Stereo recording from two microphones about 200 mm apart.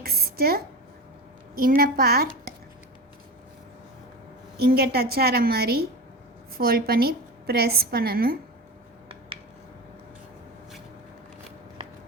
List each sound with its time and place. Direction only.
0.0 s a sound: 50° right (ahead or behind)
1.5 s a woman's voice: 45° right (ahead or behind)
4.5 s a woman's voice: 50° right (ahead or behind)